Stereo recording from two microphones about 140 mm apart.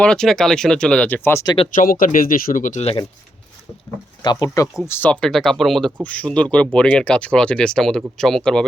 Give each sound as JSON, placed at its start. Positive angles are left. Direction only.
{"t": 0.0, "sound": "speech", "side_deg": 5}
{"t": 1.7, "sound": "speech", "side_deg": 75}
{"t": 4.2, "sound": "speech", "side_deg": 30}